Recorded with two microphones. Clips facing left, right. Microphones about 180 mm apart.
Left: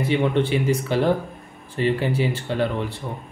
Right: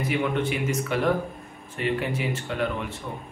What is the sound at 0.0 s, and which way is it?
Speech, 30° left (ahead or behind).